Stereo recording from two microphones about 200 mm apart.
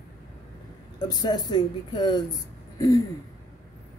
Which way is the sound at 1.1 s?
20° left (ahead or behind).